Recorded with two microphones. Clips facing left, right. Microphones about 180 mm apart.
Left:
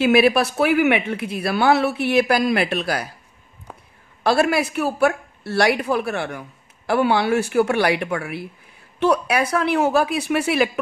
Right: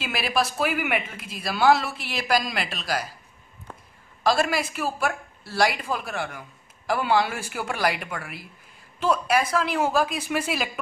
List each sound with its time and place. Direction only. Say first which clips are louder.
0.0 s speech: left 11 dB; 60° left (ahead or behind)
4.2 s speech: left 5 dB; 60° left (ahead or behind)